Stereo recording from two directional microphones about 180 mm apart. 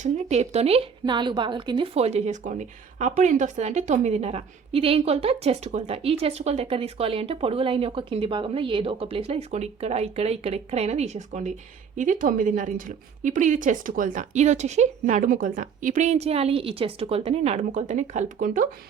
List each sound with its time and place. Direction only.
0.0 s a woman's voice: 40° right (ahead or behind)